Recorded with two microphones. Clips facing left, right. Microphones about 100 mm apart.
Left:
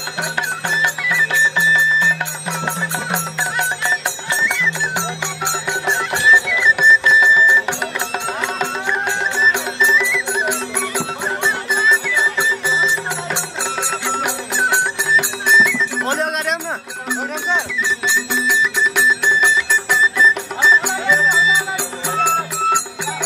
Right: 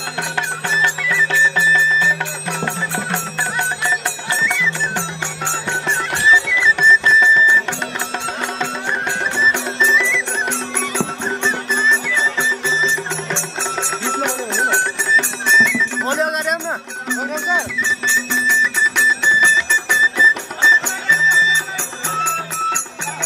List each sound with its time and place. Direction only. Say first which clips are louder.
0.2 s music: left 1 dB; 15° left (ahead or behind)
6.8 s music: even; 10° left (ahead or behind)
9.5 s music: even; 10° left (ahead or behind)
17.6 s music: even; 10° left (ahead or behind)